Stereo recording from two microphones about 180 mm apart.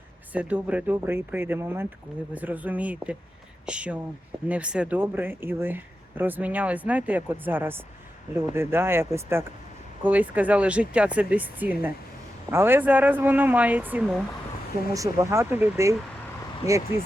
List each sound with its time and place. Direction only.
0.3 s speech: 5° right (ahead or behind)